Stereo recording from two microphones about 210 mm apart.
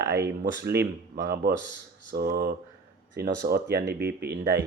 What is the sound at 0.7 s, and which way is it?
Speech, 50° right (ahead or behind).